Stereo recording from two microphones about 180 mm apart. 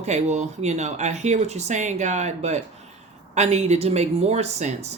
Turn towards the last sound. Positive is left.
turn(degrees=-40)  # may be behind; listen again after turning